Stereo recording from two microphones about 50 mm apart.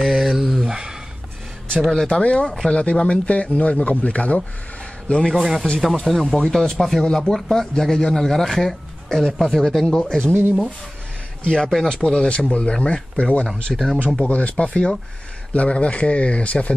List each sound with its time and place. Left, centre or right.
0.1 s a sound: centre
1.8 s speech: centre
2.7 s a man's voice: left
5.3 s a man's voice: centre
11.4 s speech: centre
13.7 s a man's voice: centre
14.3 s speech: left